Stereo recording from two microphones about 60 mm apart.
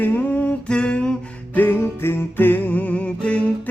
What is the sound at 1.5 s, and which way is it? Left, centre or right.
Music, left.